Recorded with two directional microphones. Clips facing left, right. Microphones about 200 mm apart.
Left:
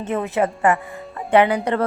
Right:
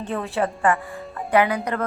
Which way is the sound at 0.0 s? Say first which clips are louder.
Left 4 dB; 20° left (ahead or behind).